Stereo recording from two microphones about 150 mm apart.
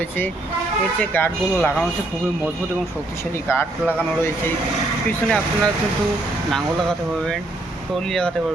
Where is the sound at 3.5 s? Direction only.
15° left (ahead or behind).